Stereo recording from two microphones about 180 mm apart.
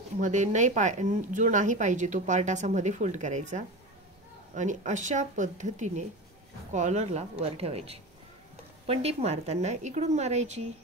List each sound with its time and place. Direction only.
0.2 s speech: 40° right (ahead or behind)